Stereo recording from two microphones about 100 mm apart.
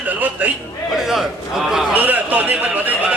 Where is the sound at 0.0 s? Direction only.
15° right (ahead or behind).